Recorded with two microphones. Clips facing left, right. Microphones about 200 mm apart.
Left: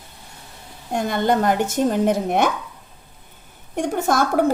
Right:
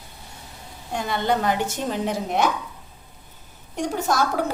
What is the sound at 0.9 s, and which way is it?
A woman's voice, 50° left (ahead or behind).